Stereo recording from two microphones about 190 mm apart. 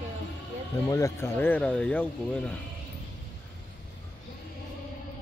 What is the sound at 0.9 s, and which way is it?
Speech, 15° left (ahead or behind).